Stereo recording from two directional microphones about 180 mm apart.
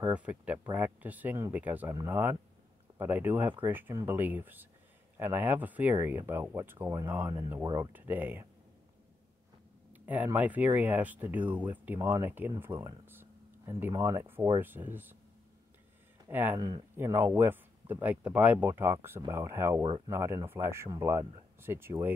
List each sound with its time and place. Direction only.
0.1 s speech: 5° right (ahead or behind)
9.9 s speech: 10° right (ahead or behind)
16.3 s speech: 10° right (ahead or behind)